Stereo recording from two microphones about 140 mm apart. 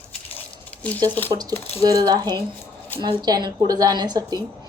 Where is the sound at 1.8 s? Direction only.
25° right (ahead or behind).